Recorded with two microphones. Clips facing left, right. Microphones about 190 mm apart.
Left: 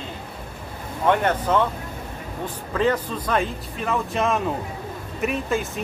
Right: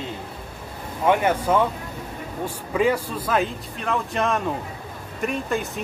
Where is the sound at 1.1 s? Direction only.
10° right (ahead or behind).